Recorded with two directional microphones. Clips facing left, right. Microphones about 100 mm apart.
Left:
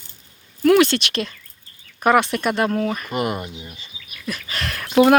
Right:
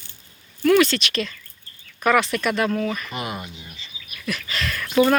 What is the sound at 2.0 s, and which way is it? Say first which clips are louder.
Speech: left 2 dB; 50° left (ahead or behind).